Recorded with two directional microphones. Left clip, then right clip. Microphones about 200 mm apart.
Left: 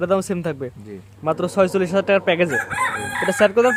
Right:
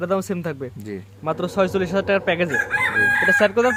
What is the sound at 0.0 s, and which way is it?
Speech, 15° left (ahead or behind).